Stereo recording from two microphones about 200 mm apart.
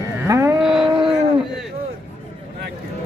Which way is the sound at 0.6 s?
Centre (ahead or behind).